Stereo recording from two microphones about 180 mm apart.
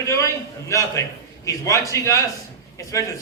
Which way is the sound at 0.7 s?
15° left (ahead or behind).